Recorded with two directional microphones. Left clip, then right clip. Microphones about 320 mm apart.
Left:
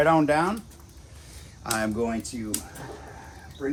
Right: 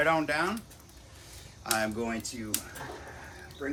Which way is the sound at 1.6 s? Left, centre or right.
Centre.